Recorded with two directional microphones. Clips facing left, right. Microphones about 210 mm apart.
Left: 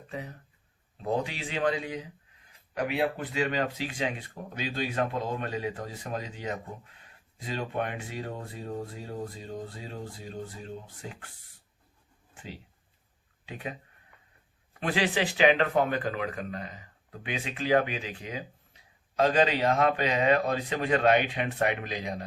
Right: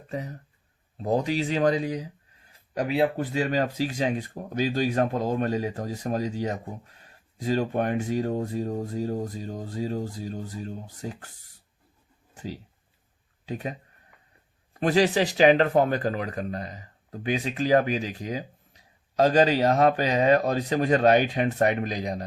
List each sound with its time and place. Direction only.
0.1 s speech: 40° right (ahead or behind)
12.3 s a sound: 40° right (ahead or behind)
13.4 s speech: 40° right (ahead or behind)